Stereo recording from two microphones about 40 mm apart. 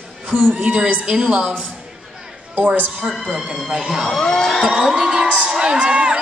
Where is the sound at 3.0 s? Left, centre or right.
Centre.